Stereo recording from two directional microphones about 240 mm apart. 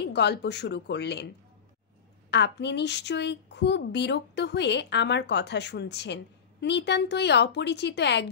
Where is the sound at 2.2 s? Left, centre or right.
Left.